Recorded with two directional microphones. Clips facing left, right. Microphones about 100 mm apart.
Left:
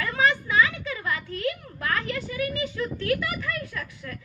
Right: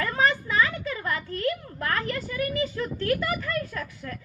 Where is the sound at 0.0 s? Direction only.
40° right (ahead or behind).